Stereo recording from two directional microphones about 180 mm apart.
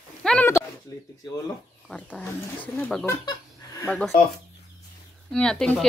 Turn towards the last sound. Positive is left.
turn(degrees=5)  # may be behind; listen again after turning